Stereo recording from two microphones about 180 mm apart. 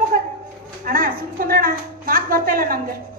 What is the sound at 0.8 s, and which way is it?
Speech, 50° right (ahead or behind).